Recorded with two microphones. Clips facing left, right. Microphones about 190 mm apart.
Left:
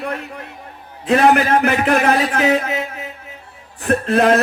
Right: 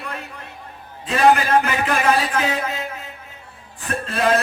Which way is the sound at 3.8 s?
65° left (ahead or behind).